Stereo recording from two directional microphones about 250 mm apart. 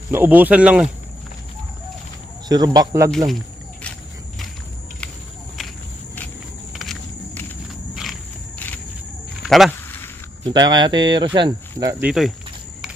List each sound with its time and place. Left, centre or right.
0.1 s speech: centre
2.5 s speech: centre
8.5 s cricket: centre
9.5 s a sound: centre
10.4 s speech: centre